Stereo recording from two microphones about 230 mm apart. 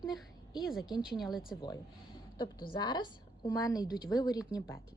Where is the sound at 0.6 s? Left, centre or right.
Centre.